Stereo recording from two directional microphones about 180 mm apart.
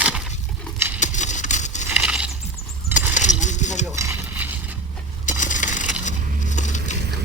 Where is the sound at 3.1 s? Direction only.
45° left (ahead or behind).